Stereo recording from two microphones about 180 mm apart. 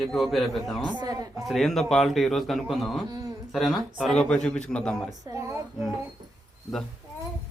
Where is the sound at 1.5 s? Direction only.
Centre (ahead or behind).